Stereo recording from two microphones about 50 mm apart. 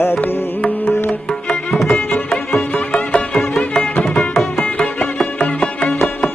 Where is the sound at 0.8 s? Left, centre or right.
Left.